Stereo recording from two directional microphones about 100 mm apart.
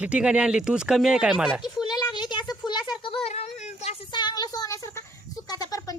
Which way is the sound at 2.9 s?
65° left (ahead or behind).